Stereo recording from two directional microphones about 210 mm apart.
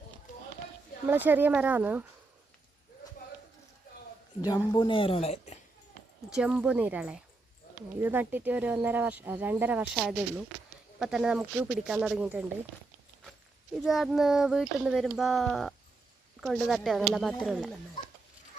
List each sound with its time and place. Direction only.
1.0 s speech: 10° right (ahead or behind)
4.4 s speech: 20° left (ahead or behind)
6.3 s speech: 5° right (ahead or behind)
13.8 s speech: centre (ahead or behind)